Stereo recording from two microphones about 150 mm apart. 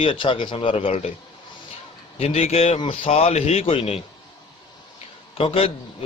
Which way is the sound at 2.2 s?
45° left (ahead or behind).